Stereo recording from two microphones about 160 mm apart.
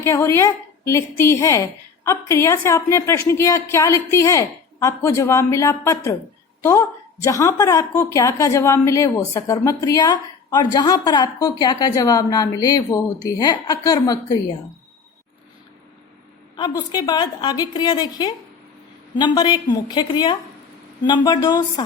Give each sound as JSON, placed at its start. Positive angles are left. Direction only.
{"t": 0.0, "sound": "a woman's voice", "side_deg": 15}
{"t": 16.6, "sound": "a woman's voice", "side_deg": 25}